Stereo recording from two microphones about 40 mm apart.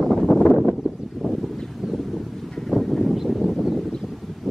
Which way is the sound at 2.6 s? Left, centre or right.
Centre.